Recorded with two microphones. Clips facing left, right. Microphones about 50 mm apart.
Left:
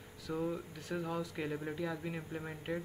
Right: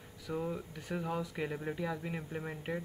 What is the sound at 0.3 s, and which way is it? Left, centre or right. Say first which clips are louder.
Speech: even; centre.